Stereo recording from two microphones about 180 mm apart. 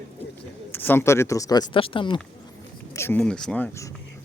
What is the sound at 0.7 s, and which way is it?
Speech, 10° left (ahead or behind).